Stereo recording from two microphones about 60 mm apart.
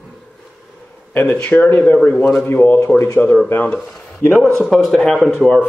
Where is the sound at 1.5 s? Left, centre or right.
Left.